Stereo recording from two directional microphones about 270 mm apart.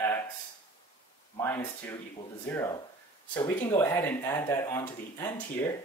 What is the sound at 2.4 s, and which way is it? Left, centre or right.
Speech, centre.